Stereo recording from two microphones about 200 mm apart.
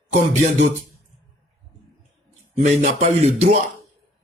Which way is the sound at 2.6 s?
40° right (ahead or behind).